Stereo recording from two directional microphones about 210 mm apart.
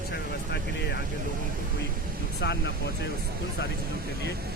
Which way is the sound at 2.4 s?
55° left (ahead or behind).